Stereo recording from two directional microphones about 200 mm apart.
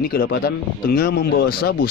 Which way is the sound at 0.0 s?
55° left (ahead or behind).